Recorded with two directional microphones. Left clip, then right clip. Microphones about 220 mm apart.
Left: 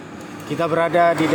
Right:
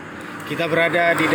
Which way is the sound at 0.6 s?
10° left (ahead or behind).